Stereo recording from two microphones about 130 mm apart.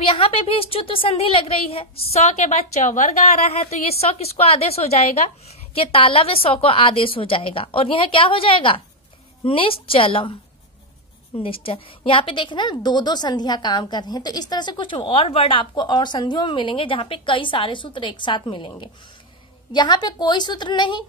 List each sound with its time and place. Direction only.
0.1 s a woman's voice: 45° left (ahead or behind)
11.3 s a woman's voice: 45° left (ahead or behind)